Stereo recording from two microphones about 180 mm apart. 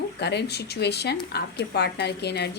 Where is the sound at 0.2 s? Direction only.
65° left (ahead or behind).